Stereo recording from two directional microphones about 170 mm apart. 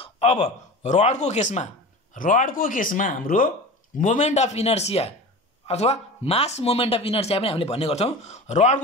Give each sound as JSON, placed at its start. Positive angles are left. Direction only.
{"t": 0.0, "sound": "speech", "side_deg": 35}